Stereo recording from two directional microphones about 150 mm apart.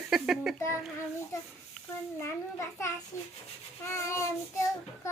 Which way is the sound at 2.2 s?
15° left (ahead or behind).